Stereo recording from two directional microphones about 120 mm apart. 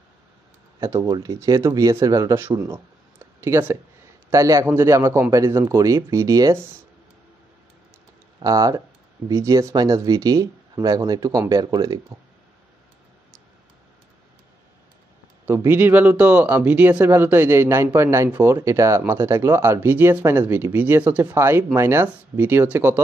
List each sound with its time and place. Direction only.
0.7 s speech: 25° right (ahead or behind)
8.4 s speech: 30° right (ahead or behind)
15.4 s speech: 20° right (ahead or behind)